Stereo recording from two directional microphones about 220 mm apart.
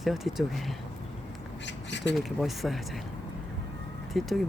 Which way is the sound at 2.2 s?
Centre (ahead or behind).